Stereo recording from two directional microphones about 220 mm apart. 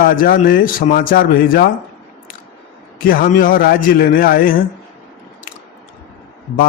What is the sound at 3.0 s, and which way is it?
A man's voice, 40° left (ahead or behind).